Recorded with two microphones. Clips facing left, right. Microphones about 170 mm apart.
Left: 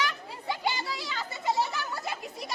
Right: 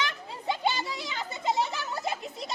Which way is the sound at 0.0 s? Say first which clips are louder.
Even; 25° right (ahead or behind).